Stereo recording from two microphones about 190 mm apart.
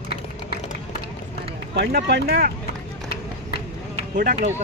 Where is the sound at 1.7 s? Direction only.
60° right (ahead or behind).